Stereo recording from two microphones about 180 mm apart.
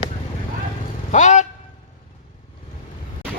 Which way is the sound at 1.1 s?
40° left (ahead or behind).